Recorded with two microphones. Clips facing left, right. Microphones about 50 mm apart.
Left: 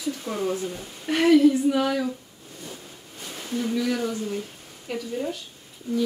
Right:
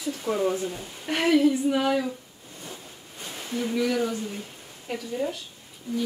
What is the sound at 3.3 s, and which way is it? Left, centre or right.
A woman's voice, centre.